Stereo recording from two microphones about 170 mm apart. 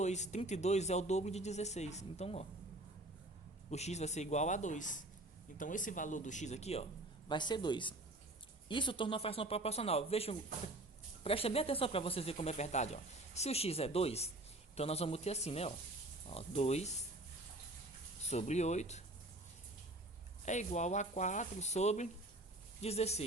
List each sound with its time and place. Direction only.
0.0 s speech: 40° left (ahead or behind)
3.7 s speech: 40° left (ahead or behind)
7.3 s speech: 25° left (ahead or behind)
18.2 s speech: 40° left (ahead or behind)
20.4 s speech: 45° left (ahead or behind)